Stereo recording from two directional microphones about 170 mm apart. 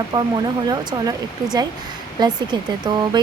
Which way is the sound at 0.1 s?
25° right (ahead or behind).